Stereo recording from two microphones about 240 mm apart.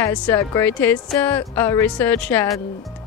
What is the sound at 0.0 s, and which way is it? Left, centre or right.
A woman's voice, centre.